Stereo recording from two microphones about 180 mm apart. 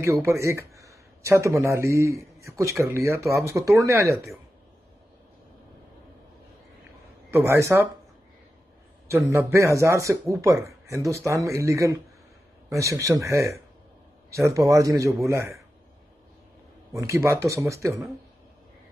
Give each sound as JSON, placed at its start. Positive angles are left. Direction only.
{"t": 0.0, "sound": "speech", "side_deg": -15}
{"t": 7.2, "sound": "speech", "side_deg": -15}
{"t": 9.0, "sound": "speech", "side_deg": -15}
{"t": 16.9, "sound": "speech", "side_deg": -15}